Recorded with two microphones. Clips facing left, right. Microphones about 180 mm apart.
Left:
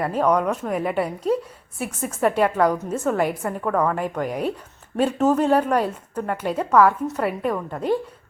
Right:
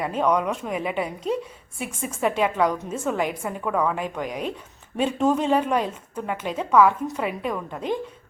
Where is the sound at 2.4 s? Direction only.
5° left (ahead or behind).